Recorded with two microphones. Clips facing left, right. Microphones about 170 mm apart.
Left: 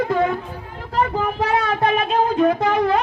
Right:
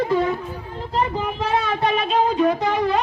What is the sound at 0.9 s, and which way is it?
Speech, 60° left (ahead or behind).